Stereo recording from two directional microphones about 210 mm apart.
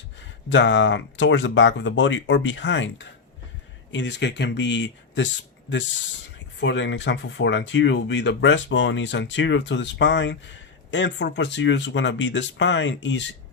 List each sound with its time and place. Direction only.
0.2 s speech: 60° left (ahead or behind)
6.6 s speech: 60° left (ahead or behind)